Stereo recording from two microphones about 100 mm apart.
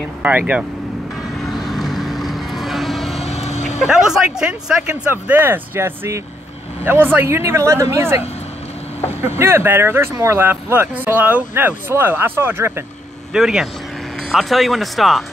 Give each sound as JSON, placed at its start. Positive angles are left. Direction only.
{"t": 0.2, "sound": "speech", "side_deg": -15}
{"t": 1.4, "sound": "vehicle", "side_deg": 0}
{"t": 3.2, "sound": "vehicle", "side_deg": 90}
{"t": 3.8, "sound": "speech", "side_deg": -5}
{"t": 5.1, "sound": "speech", "side_deg": -20}
{"t": 9.4, "sound": "speech", "side_deg": -25}
{"t": 13.3, "sound": "speech", "side_deg": -5}